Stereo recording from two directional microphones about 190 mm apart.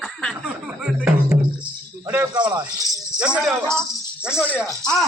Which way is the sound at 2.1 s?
10° right (ahead or behind).